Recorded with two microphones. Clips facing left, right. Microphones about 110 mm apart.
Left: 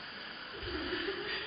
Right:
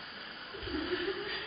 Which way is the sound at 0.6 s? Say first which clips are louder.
Right 3 dB; centre (ahead or behind).